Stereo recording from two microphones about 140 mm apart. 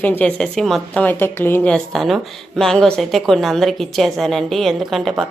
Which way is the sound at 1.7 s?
Centre (ahead or behind).